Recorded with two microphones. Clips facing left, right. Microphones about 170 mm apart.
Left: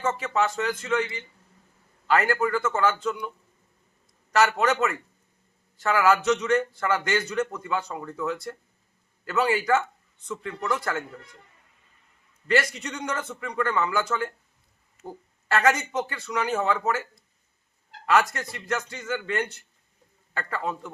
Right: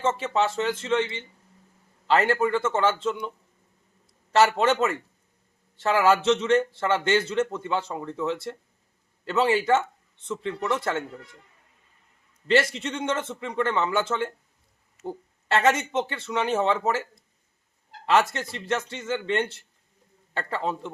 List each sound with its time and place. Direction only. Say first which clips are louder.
0.0 s a man's voice: right 1 dB; 25° right (ahead or behind)
12.7 s a man's voice: right 4 dB; 25° right (ahead or behind)